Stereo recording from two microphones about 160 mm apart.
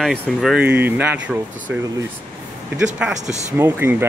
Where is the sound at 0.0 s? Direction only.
Centre (ahead or behind).